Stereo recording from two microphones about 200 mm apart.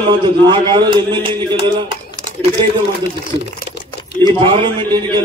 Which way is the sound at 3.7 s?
55° left (ahead or behind).